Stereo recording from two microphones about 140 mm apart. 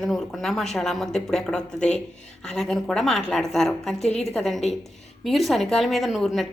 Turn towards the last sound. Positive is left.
turn(degrees=0)  # may be behind; listen again after turning